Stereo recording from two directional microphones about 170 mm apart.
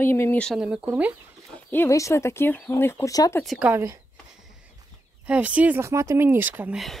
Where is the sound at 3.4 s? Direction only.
5° right (ahead or behind).